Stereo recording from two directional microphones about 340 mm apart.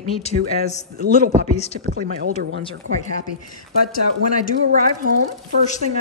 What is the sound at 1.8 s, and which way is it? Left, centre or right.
Speech, right.